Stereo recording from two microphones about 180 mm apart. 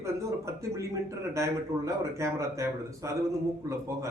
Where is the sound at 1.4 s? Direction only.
15° right (ahead or behind).